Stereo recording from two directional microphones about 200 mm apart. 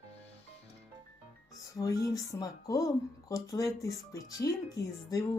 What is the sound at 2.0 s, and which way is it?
Speech, 15° left (ahead or behind).